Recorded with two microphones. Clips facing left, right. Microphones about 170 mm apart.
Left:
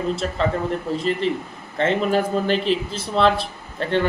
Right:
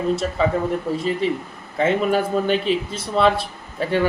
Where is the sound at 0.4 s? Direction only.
5° right (ahead or behind).